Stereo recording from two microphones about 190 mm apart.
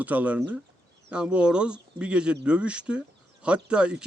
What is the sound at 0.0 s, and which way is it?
Speech, 10° right (ahead or behind).